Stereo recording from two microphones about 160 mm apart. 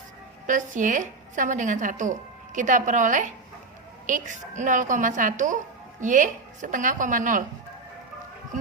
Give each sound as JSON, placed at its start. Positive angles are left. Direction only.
{"t": 0.4, "sound": "a woman's voice", "side_deg": -55}